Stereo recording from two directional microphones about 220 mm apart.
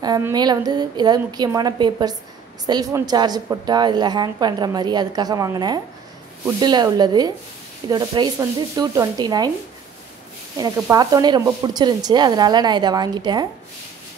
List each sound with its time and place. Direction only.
0.0 s a woman's voice: 15° right (ahead or behind)
7.9 s a sound: 20° right (ahead or behind)
10.6 s a woman's voice: 15° right (ahead or behind)